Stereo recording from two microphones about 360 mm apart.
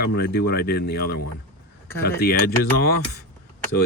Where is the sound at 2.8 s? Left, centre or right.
Left.